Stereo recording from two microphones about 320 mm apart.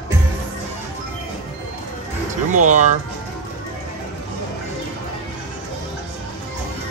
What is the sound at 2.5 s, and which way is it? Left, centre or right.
Speech, right.